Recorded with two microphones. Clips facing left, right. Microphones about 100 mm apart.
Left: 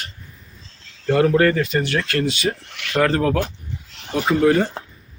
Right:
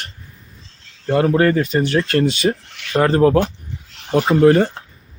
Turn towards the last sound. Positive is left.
turn(degrees=-35)  # may be behind; listen again after turning